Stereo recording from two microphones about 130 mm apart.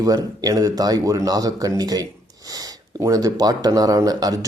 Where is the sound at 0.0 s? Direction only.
30° right (ahead or behind).